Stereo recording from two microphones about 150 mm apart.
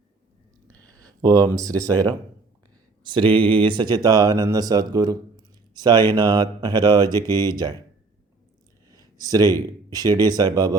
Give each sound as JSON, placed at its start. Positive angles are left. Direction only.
{"t": 0.9, "sound": "speech", "side_deg": -25}
{"t": 8.9, "sound": "a sound", "side_deg": -25}
{"t": 9.6, "sound": "speech", "side_deg": -25}